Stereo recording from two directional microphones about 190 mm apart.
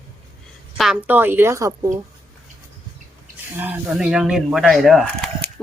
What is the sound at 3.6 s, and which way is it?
Speech, 5° right (ahead or behind).